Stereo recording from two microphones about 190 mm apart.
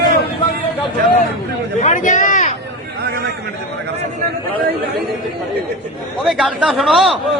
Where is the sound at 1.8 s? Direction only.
40° left (ahead or behind).